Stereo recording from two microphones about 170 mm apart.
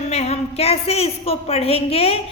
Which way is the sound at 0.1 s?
40° left (ahead or behind).